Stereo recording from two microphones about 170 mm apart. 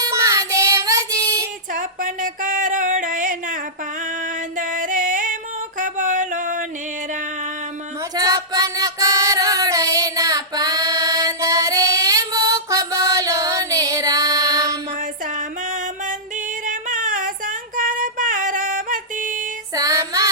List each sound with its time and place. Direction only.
0.0 s child singing: 20° right (ahead or behind)
1.7 s a sound: 50° right (ahead or behind)
4.5 s music: 50° right (ahead or behind)
8.1 s music: 20° right (ahead or behind)
15.4 s music: 50° right (ahead or behind)
16.6 s female singing: 50° right (ahead or behind)
19.7 s child singing: 20° right (ahead or behind)